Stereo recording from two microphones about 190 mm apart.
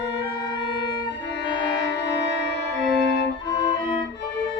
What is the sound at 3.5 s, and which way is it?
Music, 20° left (ahead or behind).